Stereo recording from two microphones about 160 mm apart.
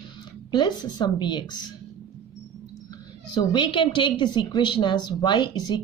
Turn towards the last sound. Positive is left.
turn(degrees=25)  # may be behind; listen again after turning